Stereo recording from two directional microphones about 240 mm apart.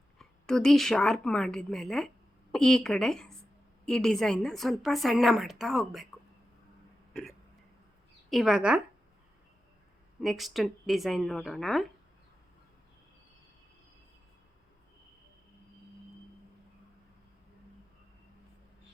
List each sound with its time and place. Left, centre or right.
0.2 s a woman's voice: centre
7.1 s hiccup: centre
8.3 s a woman's voice: centre
10.2 s a woman's voice: centre